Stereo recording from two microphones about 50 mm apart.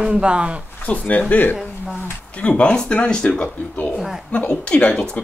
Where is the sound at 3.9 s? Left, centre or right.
Centre.